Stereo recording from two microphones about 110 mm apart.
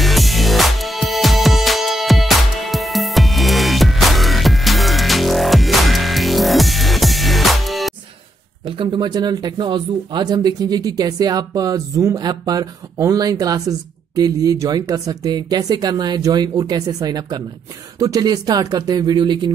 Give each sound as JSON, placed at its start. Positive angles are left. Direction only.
{"t": 0.0, "sound": "music", "side_deg": 0}
{"t": 8.6, "sound": "speech", "side_deg": -50}